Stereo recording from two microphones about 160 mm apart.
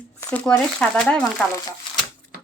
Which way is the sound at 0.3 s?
5° left (ahead or behind).